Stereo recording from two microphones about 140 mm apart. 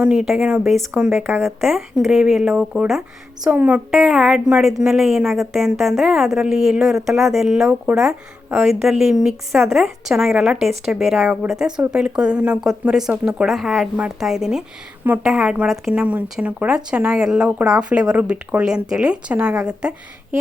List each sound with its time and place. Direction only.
0.0 s speech: 5° right (ahead or behind)
0.9 s speech: 15° right (ahead or behind)
1.5 s a woman's voice: centre (ahead or behind)